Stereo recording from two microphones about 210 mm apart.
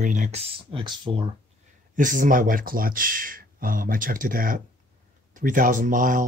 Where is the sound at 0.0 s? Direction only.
35° right (ahead or behind).